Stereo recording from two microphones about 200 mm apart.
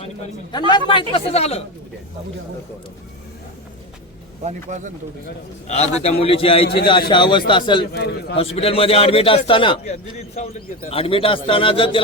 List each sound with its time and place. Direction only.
0.7 s a man's voice: 25° left (ahead or behind)
4.4 s speech: 35° right (ahead or behind)
5.6 s a man's voice: 35° left (ahead or behind)
7.9 s a man's voice: 55° left (ahead or behind)
8.4 s a man's voice: 30° left (ahead or behind)